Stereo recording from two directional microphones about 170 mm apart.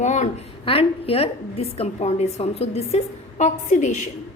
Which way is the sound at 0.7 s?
35° left (ahead or behind).